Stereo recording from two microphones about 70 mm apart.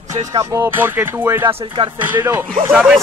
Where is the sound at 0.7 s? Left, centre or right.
Right.